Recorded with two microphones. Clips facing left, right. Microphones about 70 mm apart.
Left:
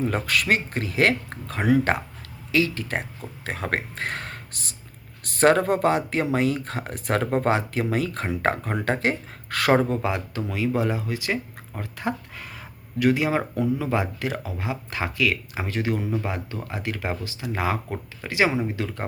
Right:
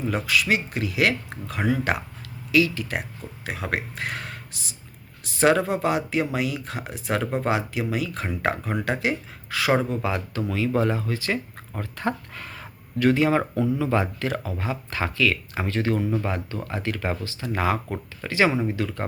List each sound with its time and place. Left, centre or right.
0.0 s speech: left
10.0 s speech: left
17.8 s speech: centre
18.3 s speech: centre